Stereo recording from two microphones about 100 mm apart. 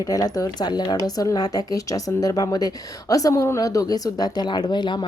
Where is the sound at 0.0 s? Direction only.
40° left (ahead or behind).